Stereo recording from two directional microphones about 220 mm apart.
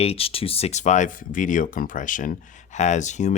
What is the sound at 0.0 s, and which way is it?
Speech, 25° left (ahead or behind).